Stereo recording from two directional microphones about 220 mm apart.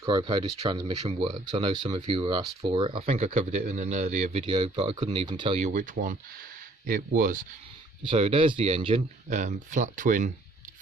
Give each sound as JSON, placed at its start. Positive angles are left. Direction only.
{"t": 0.0, "sound": "speech", "side_deg": -20}
{"t": 8.0, "sound": "speech", "side_deg": -25}